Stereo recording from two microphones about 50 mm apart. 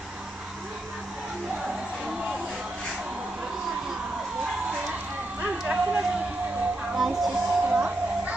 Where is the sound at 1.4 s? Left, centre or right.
Centre.